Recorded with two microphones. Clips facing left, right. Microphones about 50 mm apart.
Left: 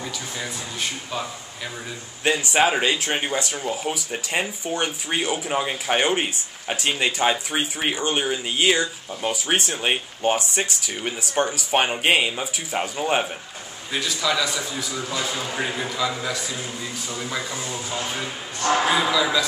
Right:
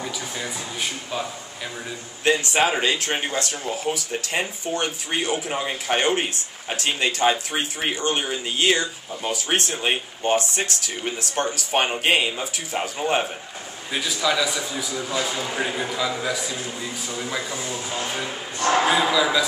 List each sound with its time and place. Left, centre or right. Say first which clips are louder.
0.0 s speech: right 1 dB; centre
2.2 s speech: even; centre
18.8 s speech: right 2 dB; centre